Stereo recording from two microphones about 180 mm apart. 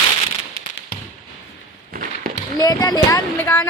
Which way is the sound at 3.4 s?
10° left (ahead or behind).